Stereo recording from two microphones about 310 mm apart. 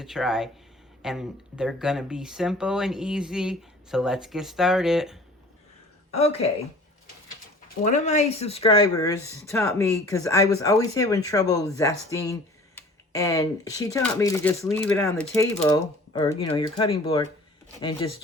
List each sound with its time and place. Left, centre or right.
0.0 s speech: centre
6.1 s speech: left
7.9 s speech: left